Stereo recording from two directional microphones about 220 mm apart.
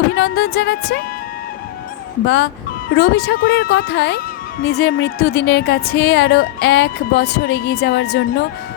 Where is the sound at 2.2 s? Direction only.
55° left (ahead or behind).